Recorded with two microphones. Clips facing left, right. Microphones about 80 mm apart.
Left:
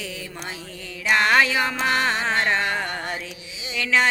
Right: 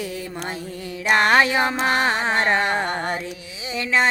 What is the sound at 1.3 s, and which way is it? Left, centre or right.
Music, right.